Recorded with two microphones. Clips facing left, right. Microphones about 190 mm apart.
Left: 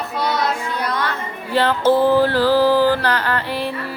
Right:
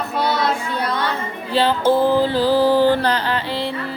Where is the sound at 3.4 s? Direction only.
15° left (ahead or behind).